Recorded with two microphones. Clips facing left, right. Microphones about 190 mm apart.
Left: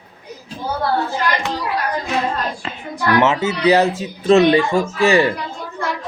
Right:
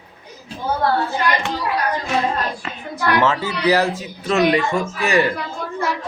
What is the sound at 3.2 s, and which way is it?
Speech, 20° left (ahead or behind).